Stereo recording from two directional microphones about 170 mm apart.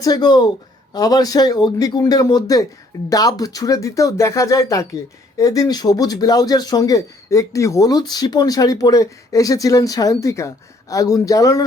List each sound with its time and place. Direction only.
0.0 s speech: 25° left (ahead or behind)